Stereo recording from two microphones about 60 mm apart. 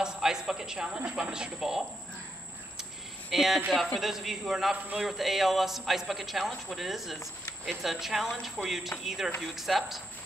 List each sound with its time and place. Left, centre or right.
0.0 s a woman's voice: centre
2.8 s a sound: centre
4.0 s a man's voice: centre